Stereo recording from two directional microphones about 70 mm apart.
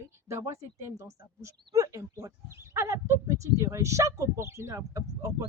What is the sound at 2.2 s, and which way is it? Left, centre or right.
Speech, right.